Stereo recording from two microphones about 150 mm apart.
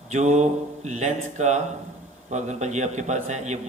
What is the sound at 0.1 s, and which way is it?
A man's voice, 50° right (ahead or behind).